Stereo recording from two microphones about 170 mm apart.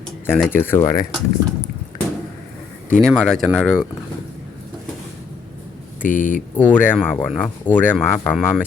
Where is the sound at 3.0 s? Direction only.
5° left (ahead or behind).